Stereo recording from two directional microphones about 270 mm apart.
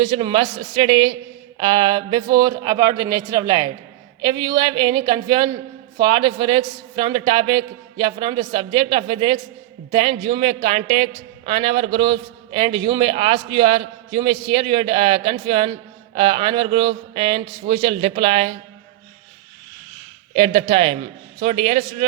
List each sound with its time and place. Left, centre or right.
0.0 s a man's voice: centre
20.3 s a man's voice: right